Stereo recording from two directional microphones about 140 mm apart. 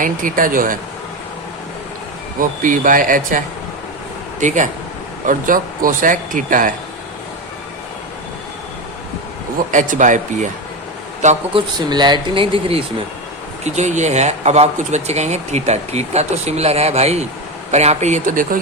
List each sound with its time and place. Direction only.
0.0 s speech: 75° right (ahead or behind)
2.4 s speech: 70° right (ahead or behind)
4.4 s a man's voice: 65° right (ahead or behind)
5.2 s speech: 75° right (ahead or behind)
9.7 s speech: 65° right (ahead or behind)
11.5 s speech: 30° right (ahead or behind)
13.7 s speech: 55° right (ahead or behind)